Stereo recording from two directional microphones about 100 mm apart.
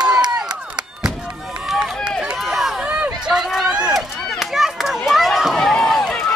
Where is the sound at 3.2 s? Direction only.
5° right (ahead or behind).